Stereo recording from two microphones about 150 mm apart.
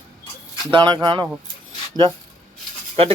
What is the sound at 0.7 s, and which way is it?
Speech, 30° right (ahead or behind).